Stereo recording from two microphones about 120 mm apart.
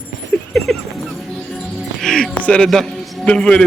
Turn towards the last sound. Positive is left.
turn(degrees=10)  # may be behind; listen again after turning